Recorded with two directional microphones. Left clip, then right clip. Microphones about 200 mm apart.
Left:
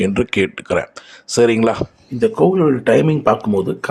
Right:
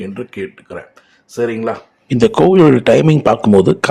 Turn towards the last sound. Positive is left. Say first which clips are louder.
# right 8 dB
turn(degrees=-35)  # may be behind; listen again after turning